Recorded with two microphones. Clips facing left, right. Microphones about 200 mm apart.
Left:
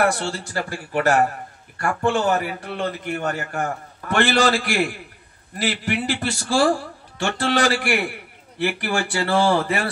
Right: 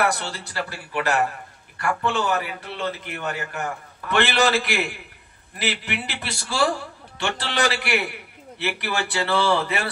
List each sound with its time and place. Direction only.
0.2 s a man's voice: 45° left (ahead or behind)